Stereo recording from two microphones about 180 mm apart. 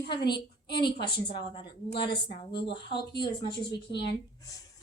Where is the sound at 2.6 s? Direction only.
65° left (ahead or behind).